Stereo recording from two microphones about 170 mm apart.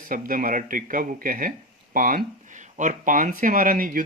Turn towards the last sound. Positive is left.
turn(degrees=-55)  # may be behind; listen again after turning